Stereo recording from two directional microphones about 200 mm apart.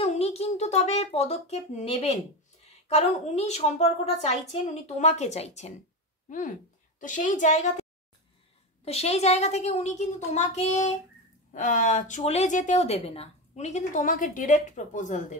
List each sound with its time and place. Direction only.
0.0 s a child's voice: 30° left (ahead or behind)
8.8 s a woman's voice: 30° left (ahead or behind)